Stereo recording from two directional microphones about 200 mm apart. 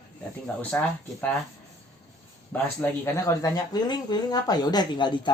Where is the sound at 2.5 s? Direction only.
10° left (ahead or behind).